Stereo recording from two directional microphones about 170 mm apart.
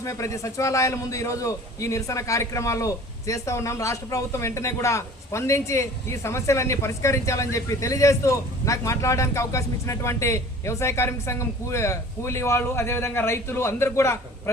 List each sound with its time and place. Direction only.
0.0 s a man's voice: 20° left (ahead or behind)